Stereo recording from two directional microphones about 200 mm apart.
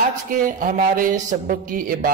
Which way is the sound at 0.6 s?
45° right (ahead or behind).